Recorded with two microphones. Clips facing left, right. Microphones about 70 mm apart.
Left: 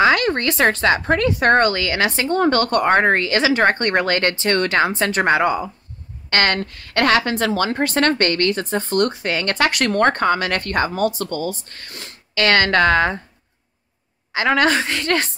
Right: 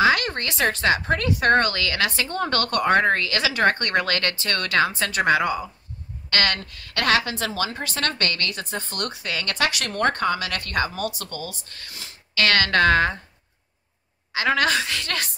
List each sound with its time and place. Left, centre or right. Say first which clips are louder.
0.0 s a woman's voice: left 4 dB; left
11.9 s speech: left 6 dB; left
12.4 s a woman's voice: left 4 dB; left
14.3 s a woman's voice: left 4 dB; left